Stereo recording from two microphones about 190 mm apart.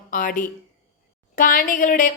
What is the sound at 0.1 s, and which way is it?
A woman's voice, 45° left (ahead or behind).